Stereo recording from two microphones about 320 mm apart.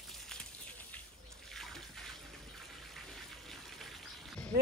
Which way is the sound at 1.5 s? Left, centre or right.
Centre.